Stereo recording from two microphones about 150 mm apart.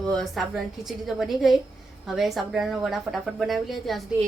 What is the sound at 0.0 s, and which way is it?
Speech, 5° left (ahead or behind).